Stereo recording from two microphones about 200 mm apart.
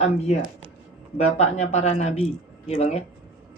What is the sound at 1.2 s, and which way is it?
Speech, 35° left (ahead or behind).